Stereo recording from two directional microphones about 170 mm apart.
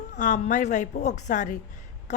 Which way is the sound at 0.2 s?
45° left (ahead or behind).